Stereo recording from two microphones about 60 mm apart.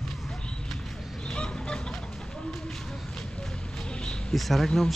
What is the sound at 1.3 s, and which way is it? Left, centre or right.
Chicken, centre.